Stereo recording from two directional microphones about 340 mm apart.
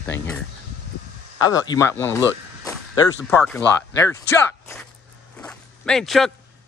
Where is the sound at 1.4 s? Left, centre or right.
Centre.